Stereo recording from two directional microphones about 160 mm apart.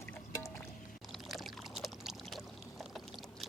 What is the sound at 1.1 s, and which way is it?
Pour, centre (ahead or behind).